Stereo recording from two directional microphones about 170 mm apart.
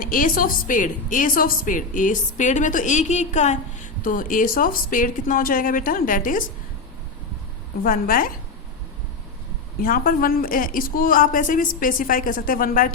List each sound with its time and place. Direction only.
0.0 s a woman's voice: 55° left (ahead or behind)
7.9 s a woman's voice: 55° left (ahead or behind)
9.8 s a woman's voice: 55° left (ahead or behind)